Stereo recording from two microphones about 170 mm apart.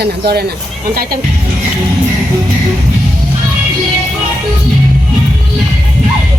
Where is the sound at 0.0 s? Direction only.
70° right (ahead or behind).